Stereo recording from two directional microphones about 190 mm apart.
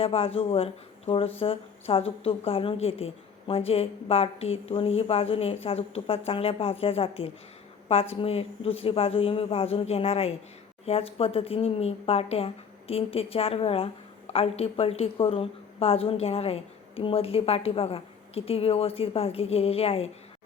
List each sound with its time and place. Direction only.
0.0 s a woman's voice: 30° left (ahead or behind)